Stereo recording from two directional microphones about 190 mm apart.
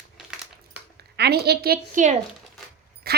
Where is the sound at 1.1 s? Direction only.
60° right (ahead or behind); by 2.2 s 40° right (ahead or behind).